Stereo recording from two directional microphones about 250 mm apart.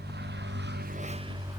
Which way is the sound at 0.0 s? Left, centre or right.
Right.